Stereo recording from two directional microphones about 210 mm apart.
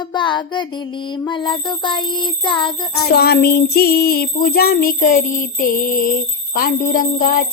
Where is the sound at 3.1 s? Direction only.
50° left (ahead or behind).